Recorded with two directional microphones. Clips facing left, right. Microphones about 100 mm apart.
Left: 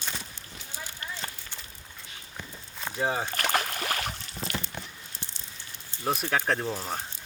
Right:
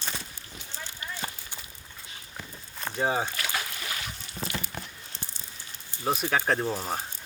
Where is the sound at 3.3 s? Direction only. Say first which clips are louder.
Left 5 dB; 50° left (ahead or behind).